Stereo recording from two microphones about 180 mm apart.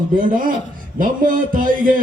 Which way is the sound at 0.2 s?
50° right (ahead or behind).